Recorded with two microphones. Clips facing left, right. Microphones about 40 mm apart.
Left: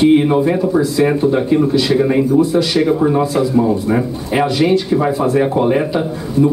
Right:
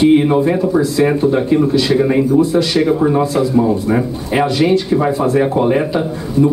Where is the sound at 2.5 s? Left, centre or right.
Right.